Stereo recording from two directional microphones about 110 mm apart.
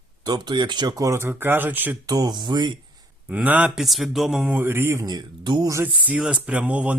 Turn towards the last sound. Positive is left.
turn(degrees=-10)  # may be behind; listen again after turning